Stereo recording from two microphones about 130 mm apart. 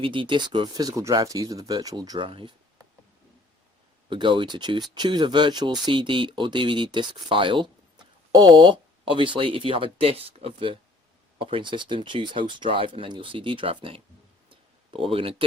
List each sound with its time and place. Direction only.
0.0 s speech: 40° right (ahead or behind)
4.1 s speech: 40° right (ahead or behind)
14.5 s a sound: 45° right (ahead or behind)